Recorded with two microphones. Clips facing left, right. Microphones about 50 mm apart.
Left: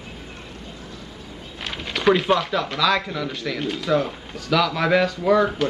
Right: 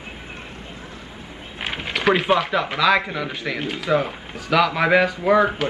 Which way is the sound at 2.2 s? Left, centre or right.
Centre.